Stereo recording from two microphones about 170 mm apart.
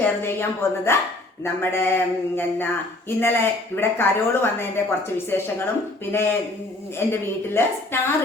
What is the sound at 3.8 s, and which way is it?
A woman's voice, 15° left (ahead or behind).